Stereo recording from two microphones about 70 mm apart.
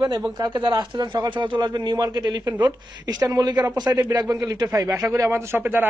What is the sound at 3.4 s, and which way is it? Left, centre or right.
Speech, right.